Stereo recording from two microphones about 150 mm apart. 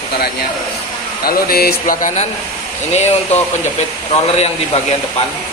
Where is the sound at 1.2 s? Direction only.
90° left; by 2.2 s 60° left (ahead or behind).